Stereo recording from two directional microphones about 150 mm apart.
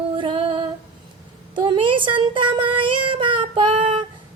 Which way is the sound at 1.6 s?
30° right (ahead or behind).